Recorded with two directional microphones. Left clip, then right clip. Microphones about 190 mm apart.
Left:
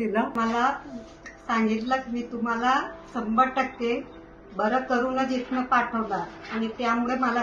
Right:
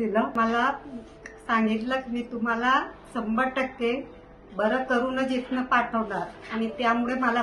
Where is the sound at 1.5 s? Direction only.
10° right (ahead or behind).